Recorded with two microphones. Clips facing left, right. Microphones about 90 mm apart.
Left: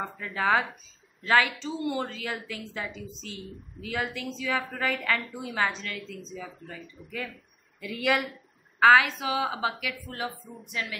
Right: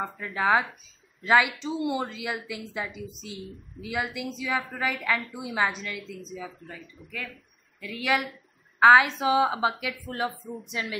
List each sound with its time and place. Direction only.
0.0 s a woman's voice: 15° right (ahead or behind)
7.0 s speech: 10° left (ahead or behind)
8.7 s a woman's voice: 20° right (ahead or behind)